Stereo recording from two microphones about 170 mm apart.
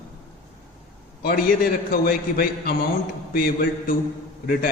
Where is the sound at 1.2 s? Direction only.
60° left (ahead or behind).